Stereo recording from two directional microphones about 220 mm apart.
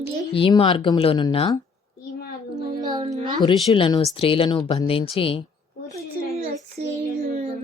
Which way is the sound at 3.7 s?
25° left (ahead or behind).